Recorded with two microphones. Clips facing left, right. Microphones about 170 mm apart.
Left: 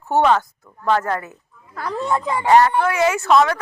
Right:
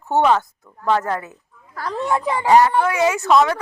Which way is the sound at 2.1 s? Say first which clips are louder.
Even; 15° right (ahead or behind).